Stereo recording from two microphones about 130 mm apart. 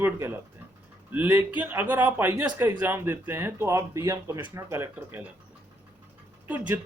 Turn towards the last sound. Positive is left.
turn(degrees=-15)  # may be behind; listen again after turning